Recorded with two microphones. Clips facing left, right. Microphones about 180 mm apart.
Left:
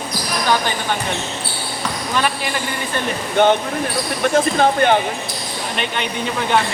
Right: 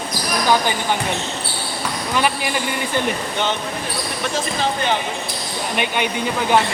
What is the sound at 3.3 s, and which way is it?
Speech, 55° left (ahead or behind).